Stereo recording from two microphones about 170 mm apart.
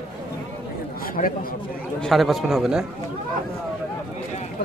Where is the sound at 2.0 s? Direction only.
Centre (ahead or behind).